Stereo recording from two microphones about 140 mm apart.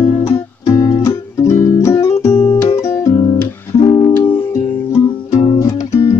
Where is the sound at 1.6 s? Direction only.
20° left (ahead or behind).